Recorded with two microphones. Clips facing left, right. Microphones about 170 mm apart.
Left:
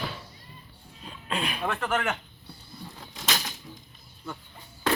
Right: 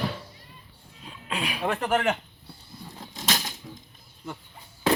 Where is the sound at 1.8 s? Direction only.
35° right (ahead or behind).